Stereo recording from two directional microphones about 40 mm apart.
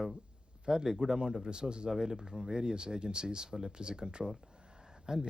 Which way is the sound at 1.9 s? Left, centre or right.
Centre.